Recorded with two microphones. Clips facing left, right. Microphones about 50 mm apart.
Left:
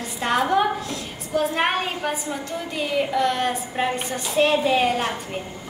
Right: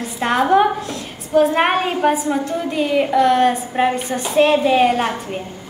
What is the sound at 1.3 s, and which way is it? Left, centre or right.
A woman's voice, right.